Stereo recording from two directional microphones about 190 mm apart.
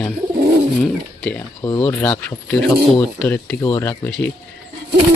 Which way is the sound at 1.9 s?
10° left (ahead or behind).